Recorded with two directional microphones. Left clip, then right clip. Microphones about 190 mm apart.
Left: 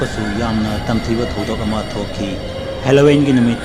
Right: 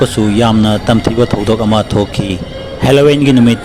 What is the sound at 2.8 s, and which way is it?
Speech, 50° right (ahead or behind).